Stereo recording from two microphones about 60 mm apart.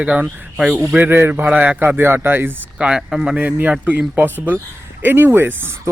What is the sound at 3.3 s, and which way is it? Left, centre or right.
Speech, right.